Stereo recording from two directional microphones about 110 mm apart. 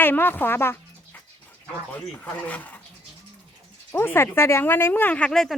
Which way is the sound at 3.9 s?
20° left (ahead or behind).